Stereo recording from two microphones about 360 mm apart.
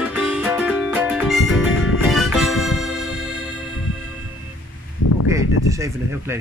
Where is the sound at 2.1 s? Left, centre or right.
Centre.